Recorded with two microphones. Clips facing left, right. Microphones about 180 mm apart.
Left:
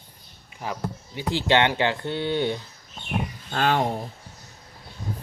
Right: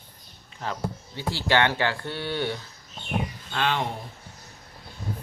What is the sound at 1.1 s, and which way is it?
Speech, 20° left (ahead or behind).